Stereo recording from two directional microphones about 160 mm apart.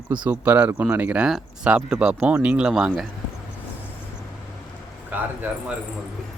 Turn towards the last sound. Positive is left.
turn(degrees=-10)  # may be behind; listen again after turning